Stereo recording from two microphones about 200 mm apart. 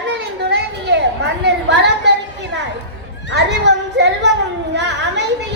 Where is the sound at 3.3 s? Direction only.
60° right (ahead or behind).